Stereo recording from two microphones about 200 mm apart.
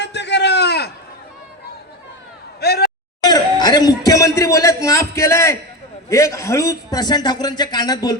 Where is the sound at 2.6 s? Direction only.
55° left (ahead or behind).